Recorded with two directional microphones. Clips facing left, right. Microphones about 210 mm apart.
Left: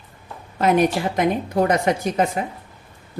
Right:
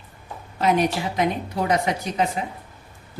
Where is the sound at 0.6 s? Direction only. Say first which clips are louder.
Left 3 dB; 50° left (ahead or behind).